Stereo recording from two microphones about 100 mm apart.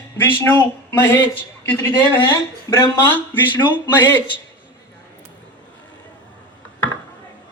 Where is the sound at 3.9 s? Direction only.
20° left (ahead or behind).